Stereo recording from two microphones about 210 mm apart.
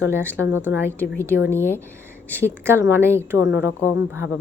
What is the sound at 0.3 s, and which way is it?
Speech, 10° right (ahead or behind).